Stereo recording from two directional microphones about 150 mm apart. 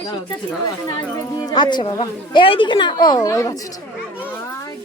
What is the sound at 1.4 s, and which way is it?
Speech, 30° left (ahead or behind).